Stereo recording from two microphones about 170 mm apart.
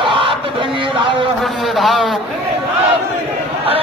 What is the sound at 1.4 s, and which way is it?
Speech, centre (ahead or behind).